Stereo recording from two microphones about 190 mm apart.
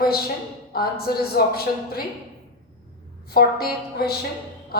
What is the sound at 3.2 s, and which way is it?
A woman's voice, 55° left (ahead or behind).